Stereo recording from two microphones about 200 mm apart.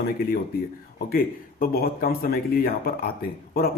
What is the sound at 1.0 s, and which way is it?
Speech, 45° left (ahead or behind).